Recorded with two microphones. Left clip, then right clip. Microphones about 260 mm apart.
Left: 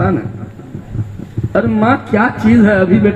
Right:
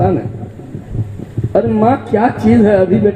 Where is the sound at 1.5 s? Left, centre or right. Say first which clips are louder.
Right 1 dB; left.